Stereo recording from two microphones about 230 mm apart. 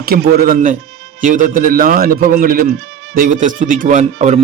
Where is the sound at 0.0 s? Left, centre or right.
Right.